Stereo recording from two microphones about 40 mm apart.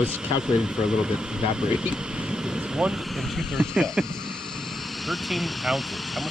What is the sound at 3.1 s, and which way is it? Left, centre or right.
Speech, centre.